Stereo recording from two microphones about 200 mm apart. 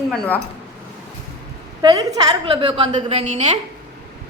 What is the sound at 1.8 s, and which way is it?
A woman's voice, 20° right (ahead or behind).